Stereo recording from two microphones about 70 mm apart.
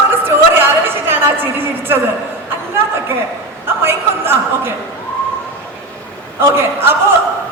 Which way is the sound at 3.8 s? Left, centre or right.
Right.